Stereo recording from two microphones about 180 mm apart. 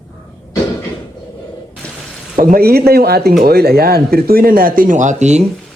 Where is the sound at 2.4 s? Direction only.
55° right (ahead or behind).